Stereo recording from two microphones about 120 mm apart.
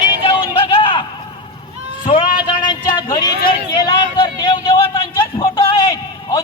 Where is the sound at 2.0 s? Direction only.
45° left (ahead or behind).